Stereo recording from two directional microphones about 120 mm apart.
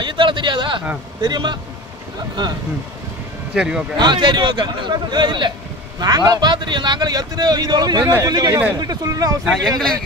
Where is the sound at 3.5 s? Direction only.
5° right (ahead or behind).